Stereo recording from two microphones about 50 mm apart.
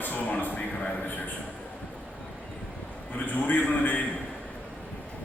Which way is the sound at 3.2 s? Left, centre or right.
Left.